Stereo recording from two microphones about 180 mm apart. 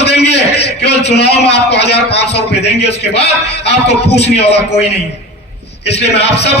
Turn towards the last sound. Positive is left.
turn(degrees=70)  # may be behind; listen again after turning